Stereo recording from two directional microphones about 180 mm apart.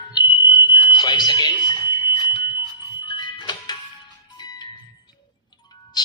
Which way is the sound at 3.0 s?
25° left (ahead or behind).